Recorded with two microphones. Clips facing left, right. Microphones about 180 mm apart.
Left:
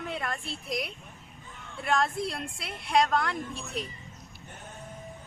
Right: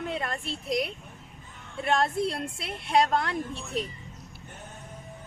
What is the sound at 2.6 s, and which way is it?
Speech, 25° right (ahead or behind).